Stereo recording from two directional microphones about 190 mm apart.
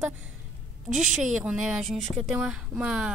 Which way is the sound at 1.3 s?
5° right (ahead or behind).